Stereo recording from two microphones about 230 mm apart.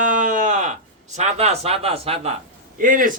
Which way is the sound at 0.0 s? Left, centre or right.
Right.